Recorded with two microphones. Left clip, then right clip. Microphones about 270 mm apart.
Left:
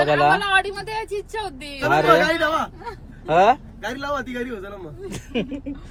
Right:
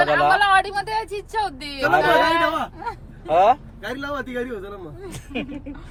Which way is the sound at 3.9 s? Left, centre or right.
Centre.